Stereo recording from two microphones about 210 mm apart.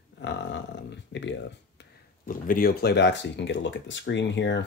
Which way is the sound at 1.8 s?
40° left (ahead or behind).